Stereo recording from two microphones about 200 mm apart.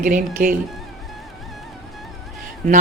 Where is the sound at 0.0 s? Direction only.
45° right (ahead or behind).